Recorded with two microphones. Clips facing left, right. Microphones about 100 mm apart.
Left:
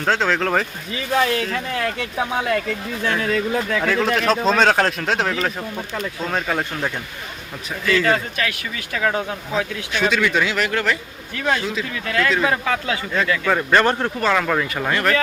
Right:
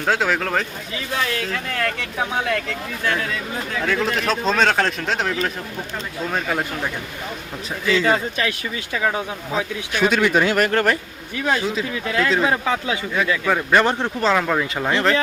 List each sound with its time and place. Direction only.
0.0 s speech: 5° right (ahead or behind)
1.1 s speech: 35° left (ahead or behind)
1.7 s speech: 15° left (ahead or behind)
3.8 s speech: centre (ahead or behind)
7.9 s speech: 20° right (ahead or behind)
9.0 s speech: 10° right (ahead or behind)
10.2 s speech: 35° right (ahead or behind)
11.3 s speech: 5° right (ahead or behind)
12.0 s speech: 15° right (ahead or behind)
14.0 s speech: 20° right (ahead or behind)
14.3 s speech: 10° right (ahead or behind)